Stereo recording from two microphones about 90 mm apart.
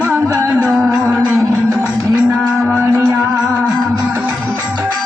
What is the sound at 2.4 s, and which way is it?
Music, 5° right (ahead or behind).